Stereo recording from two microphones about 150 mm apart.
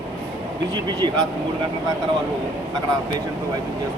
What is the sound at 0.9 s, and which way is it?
Speech, 30° right (ahead or behind).